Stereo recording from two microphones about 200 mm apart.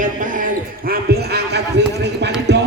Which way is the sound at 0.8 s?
55° right (ahead or behind).